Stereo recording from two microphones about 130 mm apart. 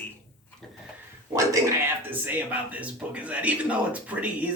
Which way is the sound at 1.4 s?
20° right (ahead or behind).